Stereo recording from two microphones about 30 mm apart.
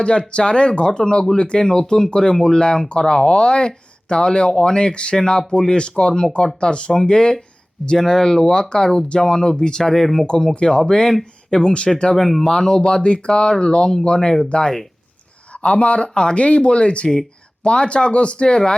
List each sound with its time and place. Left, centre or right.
0.0 s speech: left
9.8 s speech: centre
10.2 s speech: left
12.1 s speech: centre
12.5 s speech: left
12.8 s speech: left
15.5 s speech: left